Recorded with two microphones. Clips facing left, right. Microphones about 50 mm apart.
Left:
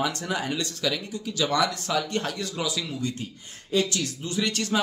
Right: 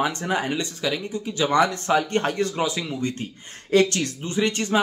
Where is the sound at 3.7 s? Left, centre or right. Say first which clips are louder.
Right 7 dB; right.